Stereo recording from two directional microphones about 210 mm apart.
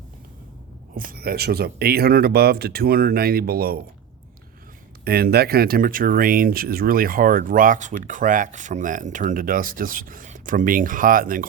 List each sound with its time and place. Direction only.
0.9 s speech: 45° right (ahead or behind)
5.0 s speech: 50° right (ahead or behind)